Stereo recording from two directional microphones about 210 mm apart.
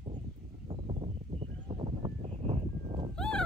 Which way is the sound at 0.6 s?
25° right (ahead or behind).